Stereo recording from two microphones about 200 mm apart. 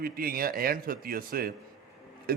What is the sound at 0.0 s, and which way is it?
A man's voice, 45° right (ahead or behind).